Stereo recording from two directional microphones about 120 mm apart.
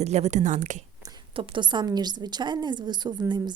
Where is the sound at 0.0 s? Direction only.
65° right (ahead or behind); by 0.8 s 90° right.